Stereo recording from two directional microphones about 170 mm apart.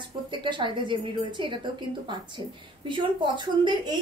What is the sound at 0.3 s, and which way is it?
A woman's voice, 30° right (ahead or behind).